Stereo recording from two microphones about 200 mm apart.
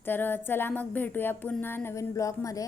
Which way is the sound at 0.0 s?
10° left (ahead or behind).